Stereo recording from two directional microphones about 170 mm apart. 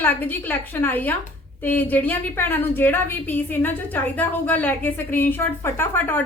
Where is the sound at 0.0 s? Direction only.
10° left (ahead or behind).